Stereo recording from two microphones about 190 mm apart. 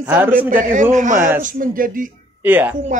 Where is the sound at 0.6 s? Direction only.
40° right (ahead or behind).